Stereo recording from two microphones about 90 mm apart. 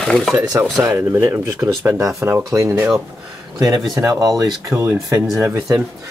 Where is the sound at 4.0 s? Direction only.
40° right (ahead or behind).